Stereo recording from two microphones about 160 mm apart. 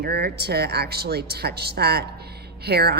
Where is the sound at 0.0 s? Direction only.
80° right.